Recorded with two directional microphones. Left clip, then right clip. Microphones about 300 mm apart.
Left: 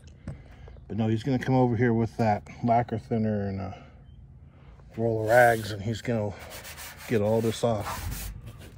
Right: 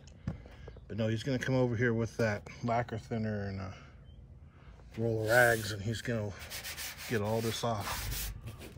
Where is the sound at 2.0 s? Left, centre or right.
Centre.